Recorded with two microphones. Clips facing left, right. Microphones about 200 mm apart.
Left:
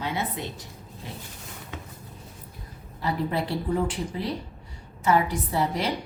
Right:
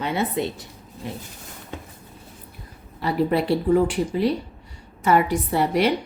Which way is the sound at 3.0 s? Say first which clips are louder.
Right 6 dB; 70° right (ahead or behind).